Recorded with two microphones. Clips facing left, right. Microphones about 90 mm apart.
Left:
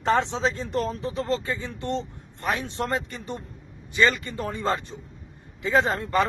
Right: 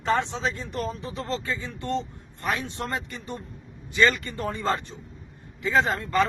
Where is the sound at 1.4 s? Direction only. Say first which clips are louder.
Left 1 dB; 25° left (ahead or behind).